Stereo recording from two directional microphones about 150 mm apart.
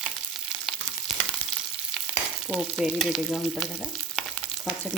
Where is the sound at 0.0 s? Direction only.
5° right (ahead or behind).